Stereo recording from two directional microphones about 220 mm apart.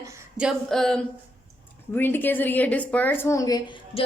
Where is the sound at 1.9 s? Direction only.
10° left (ahead or behind).